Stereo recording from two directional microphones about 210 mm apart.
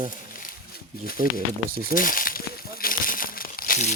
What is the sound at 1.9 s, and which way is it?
Speech, 40° left (ahead or behind).